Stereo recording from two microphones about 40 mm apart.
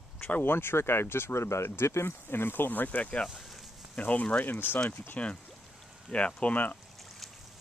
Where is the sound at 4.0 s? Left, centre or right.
Left.